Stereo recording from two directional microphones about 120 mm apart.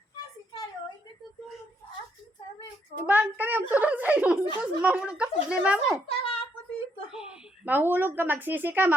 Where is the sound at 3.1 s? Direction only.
15° right (ahead or behind).